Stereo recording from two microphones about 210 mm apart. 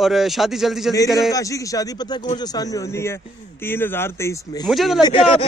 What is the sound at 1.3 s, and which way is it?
Speech, 15° left (ahead or behind).